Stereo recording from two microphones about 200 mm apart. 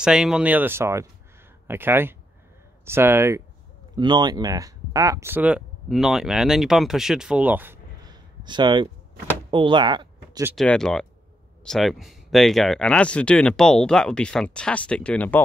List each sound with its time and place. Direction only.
0.0 s speech: 5° right (ahead or behind); by 10.4 s 20° right (ahead or behind)
10.5 s speech: centre (ahead or behind)